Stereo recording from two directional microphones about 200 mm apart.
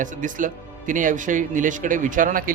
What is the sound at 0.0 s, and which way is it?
Speech, 40° right (ahead or behind).